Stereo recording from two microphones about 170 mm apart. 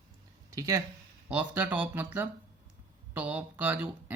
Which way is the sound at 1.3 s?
10° right (ahead or behind).